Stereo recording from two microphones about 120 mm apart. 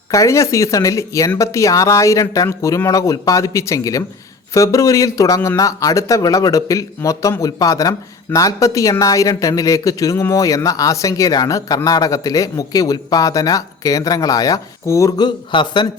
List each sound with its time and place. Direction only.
0.1 s speech: 25° left (ahead or behind)
15.5 s speech: 40° left (ahead or behind)